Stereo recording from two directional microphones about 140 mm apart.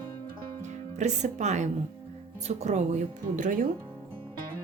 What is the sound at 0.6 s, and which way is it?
Speech, 55° right (ahead or behind).